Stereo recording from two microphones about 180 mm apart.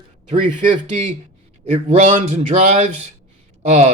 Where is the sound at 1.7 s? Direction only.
35° right (ahead or behind).